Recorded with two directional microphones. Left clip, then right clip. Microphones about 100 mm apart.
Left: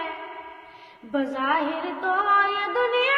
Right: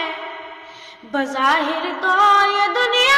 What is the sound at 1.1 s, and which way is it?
Music, 20° right (ahead or behind).